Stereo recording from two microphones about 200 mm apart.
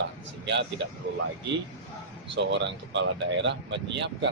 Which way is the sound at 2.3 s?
65° right (ahead or behind).